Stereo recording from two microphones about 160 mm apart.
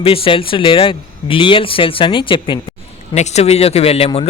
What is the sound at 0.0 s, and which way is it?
Speech, 35° left (ahead or behind).